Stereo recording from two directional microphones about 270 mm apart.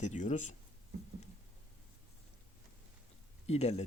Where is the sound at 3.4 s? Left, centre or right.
Left.